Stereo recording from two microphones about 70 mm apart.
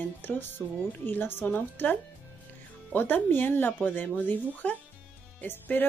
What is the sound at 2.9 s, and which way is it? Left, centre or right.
Speech, left.